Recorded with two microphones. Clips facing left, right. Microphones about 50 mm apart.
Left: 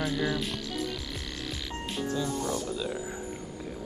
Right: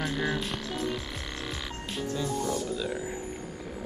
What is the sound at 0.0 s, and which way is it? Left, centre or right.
Music, right.